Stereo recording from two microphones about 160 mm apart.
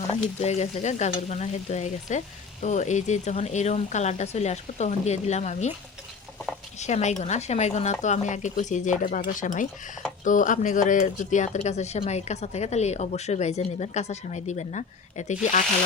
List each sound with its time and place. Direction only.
0.1 s frying: 40° left (ahead or behind)
6.7 s frying: 45° left (ahead or behind)